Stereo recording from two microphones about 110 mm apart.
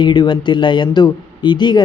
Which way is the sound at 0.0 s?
45° left (ahead or behind).